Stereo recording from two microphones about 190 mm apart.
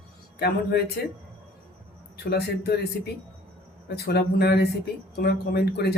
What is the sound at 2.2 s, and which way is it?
Speech, 55° left (ahead or behind).